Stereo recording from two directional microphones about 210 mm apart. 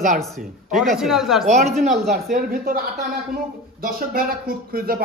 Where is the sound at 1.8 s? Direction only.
35° right (ahead or behind).